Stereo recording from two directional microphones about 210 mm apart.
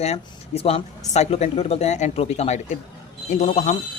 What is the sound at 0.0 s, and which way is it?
Speech, 30° left (ahead or behind).